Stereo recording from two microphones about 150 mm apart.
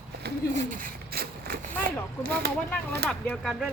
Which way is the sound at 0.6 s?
60° right (ahead or behind).